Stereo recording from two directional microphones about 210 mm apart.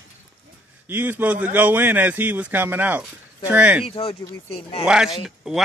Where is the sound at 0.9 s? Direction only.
10° right (ahead or behind).